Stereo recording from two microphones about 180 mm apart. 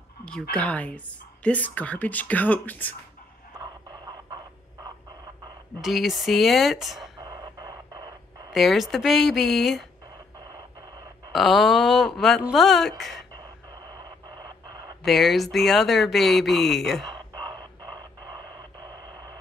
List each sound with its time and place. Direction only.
0.2 s a woman's voice: 5° left (ahead or behind)
5.8 s speech: centre (ahead or behind)
7.2 s radio: 20° right (ahead or behind)
8.5 s speech: centre (ahead or behind)
11.3 s speech: centre (ahead or behind)
15.0 s speech: centre (ahead or behind)